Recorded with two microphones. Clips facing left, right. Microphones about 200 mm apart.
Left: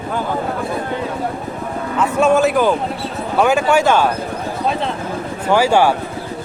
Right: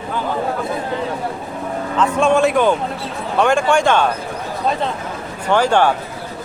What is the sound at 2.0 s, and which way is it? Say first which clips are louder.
Speech: left 1 dB; 5° left (ahead or behind).